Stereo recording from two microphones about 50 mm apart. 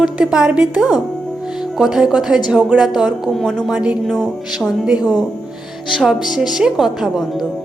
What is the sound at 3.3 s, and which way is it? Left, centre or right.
Speech, centre.